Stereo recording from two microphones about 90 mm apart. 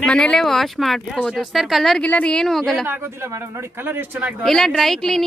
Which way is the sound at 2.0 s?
15° left (ahead or behind).